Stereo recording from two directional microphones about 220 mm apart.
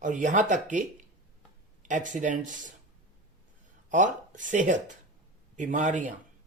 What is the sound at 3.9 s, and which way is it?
Speech, 35° right (ahead or behind).